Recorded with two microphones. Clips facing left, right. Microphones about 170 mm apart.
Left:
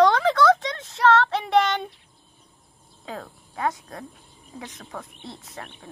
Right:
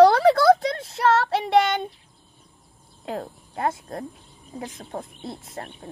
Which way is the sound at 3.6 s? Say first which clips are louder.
Right 1 dB; 50° right (ahead or behind).